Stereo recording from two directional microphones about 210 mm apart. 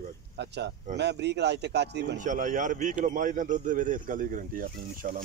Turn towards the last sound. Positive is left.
turn(degrees=-40)  # may be behind; listen again after turning